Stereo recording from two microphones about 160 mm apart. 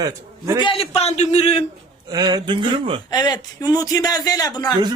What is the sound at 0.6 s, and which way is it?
A man's voice, 35° left (ahead or behind).